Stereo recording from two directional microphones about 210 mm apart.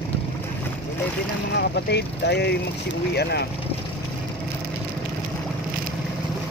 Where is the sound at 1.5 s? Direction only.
55° left (ahead or behind).